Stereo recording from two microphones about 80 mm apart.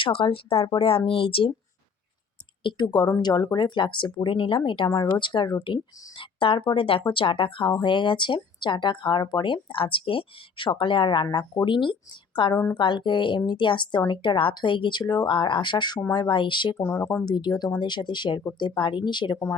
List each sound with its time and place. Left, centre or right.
0.2 s speech: left
2.6 s speech: left
5.2 s speech: left
5.6 s speech: left
11.6 s speech: left
16.7 s speech: left
17.2 s speech: left